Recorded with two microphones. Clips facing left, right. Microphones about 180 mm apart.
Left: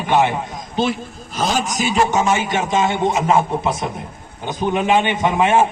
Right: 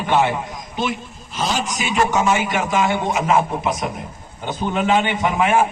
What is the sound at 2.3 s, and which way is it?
A man's voice, 25° left (ahead or behind).